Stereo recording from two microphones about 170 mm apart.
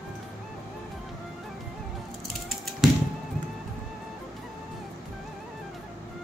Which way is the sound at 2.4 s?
Centre (ahead or behind).